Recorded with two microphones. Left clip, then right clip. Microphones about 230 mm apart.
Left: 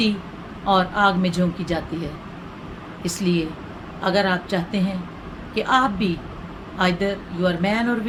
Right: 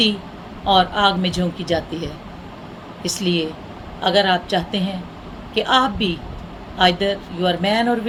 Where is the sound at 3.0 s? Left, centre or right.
Centre.